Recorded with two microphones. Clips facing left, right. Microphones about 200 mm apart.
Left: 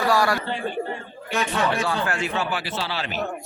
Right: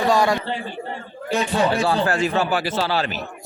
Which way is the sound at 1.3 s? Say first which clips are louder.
Right 4 dB; 35° right (ahead or behind).